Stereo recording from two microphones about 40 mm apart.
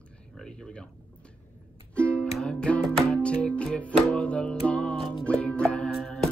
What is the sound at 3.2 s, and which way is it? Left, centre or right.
Music, left.